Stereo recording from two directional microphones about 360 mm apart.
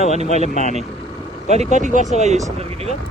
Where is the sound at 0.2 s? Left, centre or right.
Centre.